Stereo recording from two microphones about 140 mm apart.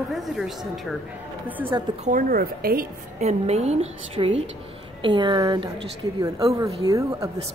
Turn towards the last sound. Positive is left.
turn(degrees=-25)  # may be behind; listen again after turning